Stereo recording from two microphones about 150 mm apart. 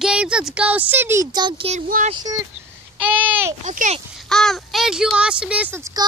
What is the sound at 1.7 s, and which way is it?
Speech, 55° right (ahead or behind).